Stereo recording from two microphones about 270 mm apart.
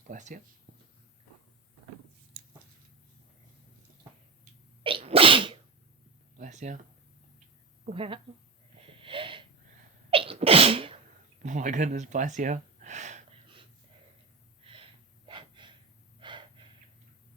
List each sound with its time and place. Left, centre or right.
0.1 s a woman's voice: right
4.8 s sneeze: centre
6.3 s a sound: right
7.9 s a woman's voice: right
9.0 s wheeze: centre
10.1 s sneeze: right
11.4 s gasp: right
14.6 s a sound: centre
15.3 s gasp: centre